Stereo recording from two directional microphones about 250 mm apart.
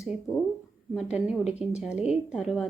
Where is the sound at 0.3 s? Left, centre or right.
Centre.